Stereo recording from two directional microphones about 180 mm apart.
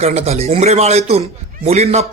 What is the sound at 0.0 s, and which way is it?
A man's voice, 35° right (ahead or behind).